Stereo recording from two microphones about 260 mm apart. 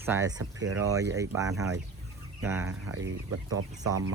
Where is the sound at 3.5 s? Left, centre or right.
Right.